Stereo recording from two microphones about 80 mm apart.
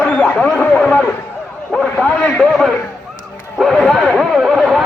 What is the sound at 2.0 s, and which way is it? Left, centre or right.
Speech, centre.